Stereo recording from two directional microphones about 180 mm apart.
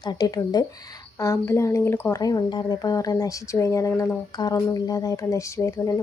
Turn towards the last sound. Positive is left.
turn(degrees=15)  # may be behind; listen again after turning